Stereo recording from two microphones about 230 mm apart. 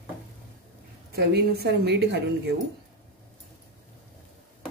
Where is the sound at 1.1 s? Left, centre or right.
Right.